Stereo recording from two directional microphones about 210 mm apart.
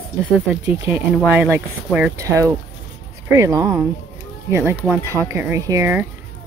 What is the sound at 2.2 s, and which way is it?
Speech, 15° right (ahead or behind).